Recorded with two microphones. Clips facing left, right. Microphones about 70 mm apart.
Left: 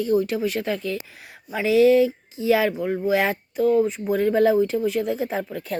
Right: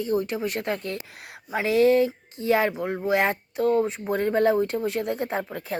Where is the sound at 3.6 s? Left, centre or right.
Right.